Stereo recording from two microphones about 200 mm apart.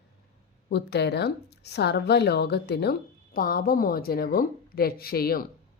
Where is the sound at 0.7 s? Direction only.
55° left (ahead or behind).